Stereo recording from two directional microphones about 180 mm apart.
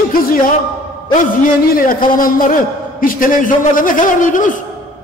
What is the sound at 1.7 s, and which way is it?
A man's voice, 50° left (ahead or behind).